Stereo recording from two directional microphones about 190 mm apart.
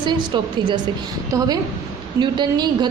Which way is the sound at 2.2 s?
20° right (ahead or behind).